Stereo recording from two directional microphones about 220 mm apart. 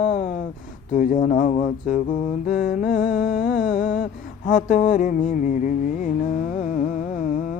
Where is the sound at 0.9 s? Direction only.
35° left (ahead or behind).